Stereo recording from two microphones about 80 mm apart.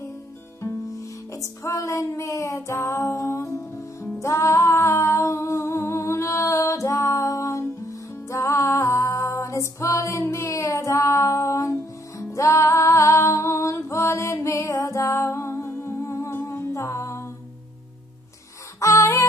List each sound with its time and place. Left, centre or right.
1.3 s music: left
4.2 s humming: left
18.8 s music: left